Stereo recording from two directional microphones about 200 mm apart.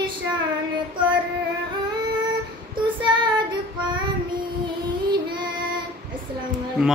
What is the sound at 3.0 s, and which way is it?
Child singing, 20° right (ahead or behind).